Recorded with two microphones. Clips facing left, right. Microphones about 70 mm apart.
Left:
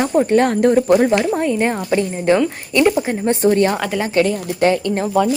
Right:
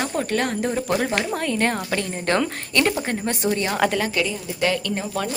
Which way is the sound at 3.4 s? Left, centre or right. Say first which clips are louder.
Left 10 dB; left.